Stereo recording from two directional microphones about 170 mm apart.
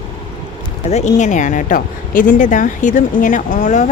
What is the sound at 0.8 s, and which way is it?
Speech, 40° left (ahead or behind).